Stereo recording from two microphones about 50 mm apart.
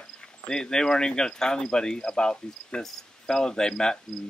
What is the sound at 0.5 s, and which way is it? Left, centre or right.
Speech, centre.